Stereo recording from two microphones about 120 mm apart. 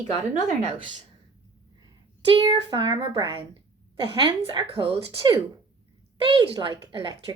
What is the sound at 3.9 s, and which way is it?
Speech, 45° right (ahead or behind).